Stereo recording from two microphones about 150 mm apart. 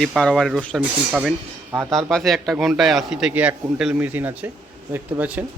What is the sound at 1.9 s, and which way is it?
A man's voice, centre (ahead or behind).